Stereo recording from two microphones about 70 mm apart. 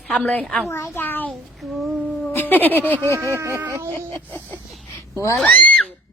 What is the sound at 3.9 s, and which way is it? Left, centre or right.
Speech, left.